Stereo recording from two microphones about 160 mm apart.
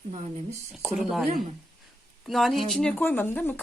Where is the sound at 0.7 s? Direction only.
Centre (ahead or behind).